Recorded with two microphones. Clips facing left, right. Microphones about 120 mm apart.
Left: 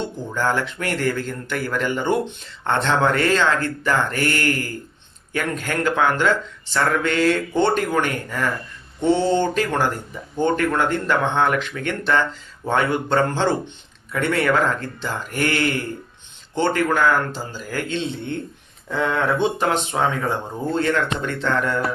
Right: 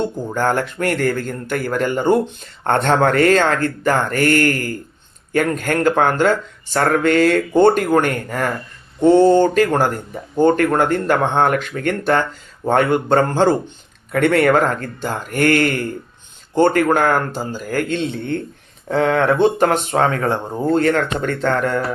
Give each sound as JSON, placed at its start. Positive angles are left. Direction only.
{"t": 0.0, "sound": "speech", "side_deg": -50}